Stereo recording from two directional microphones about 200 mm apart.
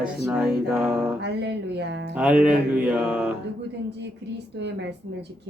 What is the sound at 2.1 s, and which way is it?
A man's voice, 5° right (ahead or behind).